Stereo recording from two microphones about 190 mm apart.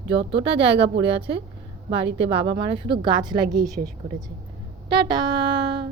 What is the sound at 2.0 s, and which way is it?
Speech, 70° right (ahead or behind).